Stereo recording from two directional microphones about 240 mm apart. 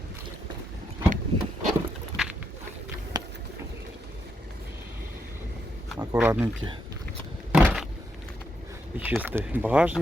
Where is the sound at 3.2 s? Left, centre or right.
Centre.